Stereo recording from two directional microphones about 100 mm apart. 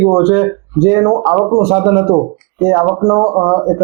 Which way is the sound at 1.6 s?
15° right (ahead or behind).